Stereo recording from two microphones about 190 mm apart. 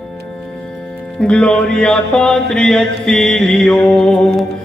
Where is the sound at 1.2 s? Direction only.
5° left (ahead or behind).